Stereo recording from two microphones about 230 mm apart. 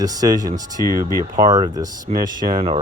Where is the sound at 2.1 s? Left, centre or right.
Right.